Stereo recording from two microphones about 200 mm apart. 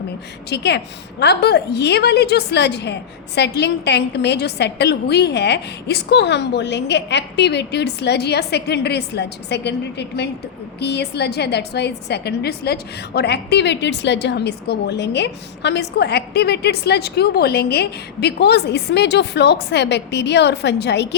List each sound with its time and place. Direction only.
0.5 s a woman's voice: 55° left (ahead or behind)